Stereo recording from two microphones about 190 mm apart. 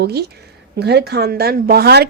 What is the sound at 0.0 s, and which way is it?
A woman's voice, 60° right (ahead or behind).